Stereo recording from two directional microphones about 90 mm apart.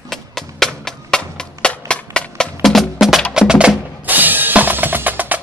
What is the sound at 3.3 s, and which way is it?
Drum, 10° right (ahead or behind).